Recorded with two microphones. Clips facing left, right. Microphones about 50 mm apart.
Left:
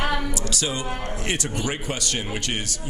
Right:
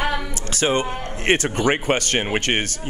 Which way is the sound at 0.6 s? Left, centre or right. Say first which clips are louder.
Right 11 dB; right.